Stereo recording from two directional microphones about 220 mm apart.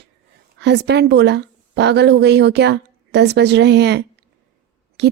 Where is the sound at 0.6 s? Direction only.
50° right (ahead or behind).